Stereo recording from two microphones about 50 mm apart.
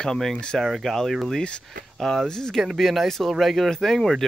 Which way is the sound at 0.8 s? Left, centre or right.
Centre.